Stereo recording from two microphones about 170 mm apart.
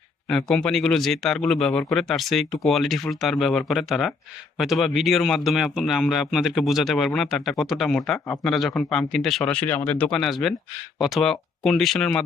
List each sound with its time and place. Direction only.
0.3 s a man's voice: centre (ahead or behind)